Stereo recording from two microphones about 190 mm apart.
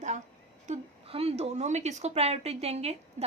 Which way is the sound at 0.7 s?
30° right (ahead or behind).